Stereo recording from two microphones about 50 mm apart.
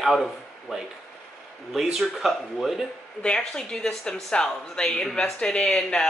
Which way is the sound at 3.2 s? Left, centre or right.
Centre.